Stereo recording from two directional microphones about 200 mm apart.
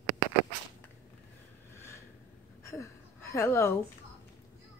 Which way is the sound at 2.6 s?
15° left (ahead or behind).